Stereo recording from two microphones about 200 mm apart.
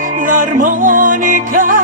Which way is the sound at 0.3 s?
40° right (ahead or behind).